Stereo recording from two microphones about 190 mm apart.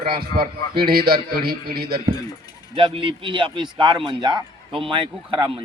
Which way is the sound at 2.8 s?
25° right (ahead or behind).